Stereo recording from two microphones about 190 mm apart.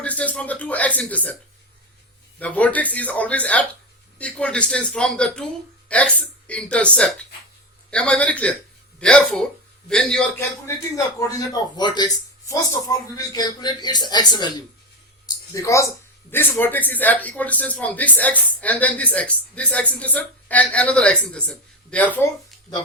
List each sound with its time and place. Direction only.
0.0 s speech: 5° left (ahead or behind)
2.4 s speech: 10° left (ahead or behind)
10.7 s speech: 15° left (ahead or behind)